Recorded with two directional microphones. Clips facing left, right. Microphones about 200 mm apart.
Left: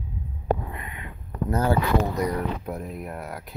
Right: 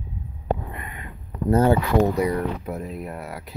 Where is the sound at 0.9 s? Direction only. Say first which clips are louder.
Even; 40° right (ahead or behind).